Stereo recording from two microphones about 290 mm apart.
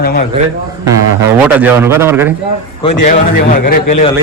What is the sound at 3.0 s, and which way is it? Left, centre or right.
Speech, left.